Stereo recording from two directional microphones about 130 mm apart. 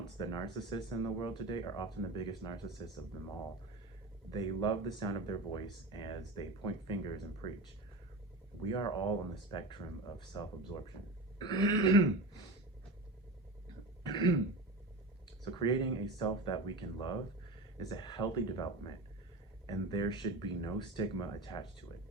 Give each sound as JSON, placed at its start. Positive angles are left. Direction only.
{"t": 0.2, "sound": "speech", "side_deg": 35}
{"t": 4.3, "sound": "speech", "side_deg": 40}
{"t": 8.6, "sound": "speech", "side_deg": 35}
{"t": 14.0, "sound": "throat clearing", "side_deg": 35}
{"t": 15.4, "sound": "speech", "side_deg": 35}